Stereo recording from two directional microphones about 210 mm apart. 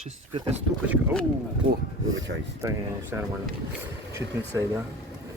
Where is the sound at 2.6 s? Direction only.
10° right (ahead or behind).